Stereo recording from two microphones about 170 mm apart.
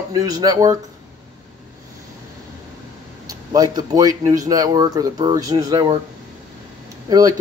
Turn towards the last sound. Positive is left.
turn(degrees=-20)  # may be behind; listen again after turning